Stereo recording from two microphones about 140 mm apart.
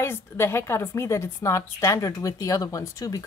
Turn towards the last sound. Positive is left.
turn(degrees=25)  # may be behind; listen again after turning